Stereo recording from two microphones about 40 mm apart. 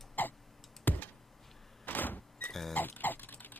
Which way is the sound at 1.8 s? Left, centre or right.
Left.